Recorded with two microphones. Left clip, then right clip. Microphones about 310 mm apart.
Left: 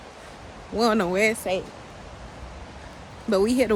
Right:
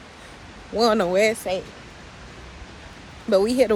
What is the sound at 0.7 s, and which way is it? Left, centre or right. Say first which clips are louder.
Speech: right 3 dB; centre.